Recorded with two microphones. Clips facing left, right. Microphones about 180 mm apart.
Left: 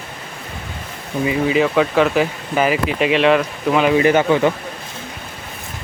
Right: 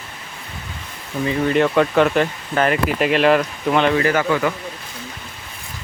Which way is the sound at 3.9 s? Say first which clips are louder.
Left 4 dB; 20° left (ahead or behind).